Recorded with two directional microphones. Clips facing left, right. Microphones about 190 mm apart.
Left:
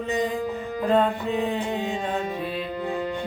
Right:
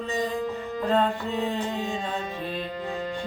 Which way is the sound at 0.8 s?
15° left (ahead or behind).